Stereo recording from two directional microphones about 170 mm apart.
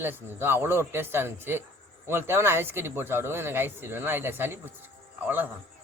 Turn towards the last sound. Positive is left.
turn(degrees=-10)  # may be behind; listen again after turning